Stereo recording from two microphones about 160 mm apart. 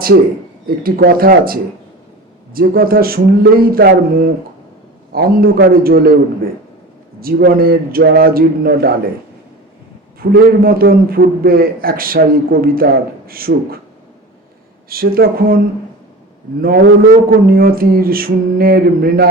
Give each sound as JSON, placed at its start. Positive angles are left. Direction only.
{"t": 0.8, "sound": "a man's voice", "side_deg": -70}
{"t": 7.2, "sound": "a man's voice", "side_deg": -70}
{"t": 10.2, "sound": "a man's voice", "side_deg": -65}
{"t": 14.8, "sound": "a man's voice", "side_deg": -65}